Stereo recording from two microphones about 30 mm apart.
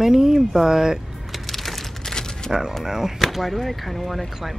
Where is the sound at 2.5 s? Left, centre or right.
Centre.